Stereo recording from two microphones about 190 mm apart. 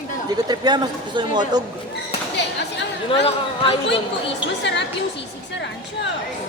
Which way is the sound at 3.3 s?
30° left (ahead or behind).